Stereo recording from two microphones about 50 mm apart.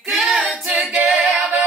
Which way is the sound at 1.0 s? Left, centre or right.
Centre.